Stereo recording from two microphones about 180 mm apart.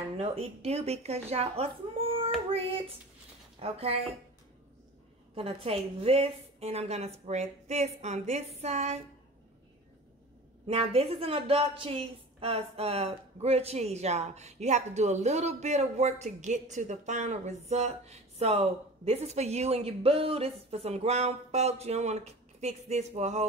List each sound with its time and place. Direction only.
0.2 s a woman's voice: 35° right (ahead or behind)
1.3 s a sound: 35° right (ahead or behind)
2.5 s a woman's voice: 30° right (ahead or behind)
5.3 s a woman's voice: 35° right (ahead or behind)
10.7 s a woman's voice: 35° right (ahead or behind)